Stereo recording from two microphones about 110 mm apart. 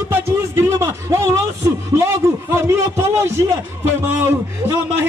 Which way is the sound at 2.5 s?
25° right (ahead or behind).